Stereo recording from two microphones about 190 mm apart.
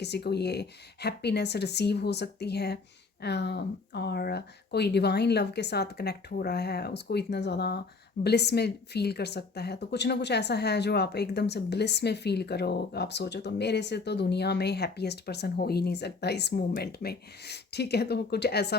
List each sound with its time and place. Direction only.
0.0 s a woman's voice: 60° left (ahead or behind)